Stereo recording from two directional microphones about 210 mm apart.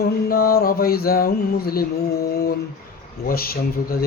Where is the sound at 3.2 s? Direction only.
45° left (ahead or behind).